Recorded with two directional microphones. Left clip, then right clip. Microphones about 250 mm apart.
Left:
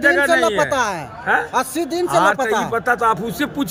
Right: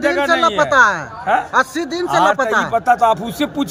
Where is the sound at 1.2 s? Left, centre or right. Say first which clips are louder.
Right 1 dB; left.